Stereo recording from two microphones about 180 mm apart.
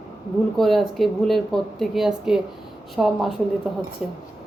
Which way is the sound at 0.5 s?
Centre (ahead or behind).